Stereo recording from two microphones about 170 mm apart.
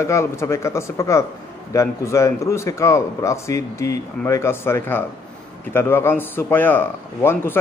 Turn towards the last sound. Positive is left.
turn(degrees=10)  # may be behind; listen again after turning